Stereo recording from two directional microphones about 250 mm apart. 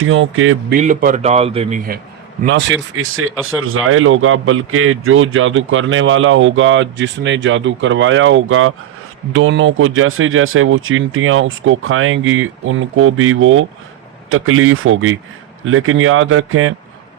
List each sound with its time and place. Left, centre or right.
0.0 s speech: right
0.7 s a man's voice: right
2.5 s speech: right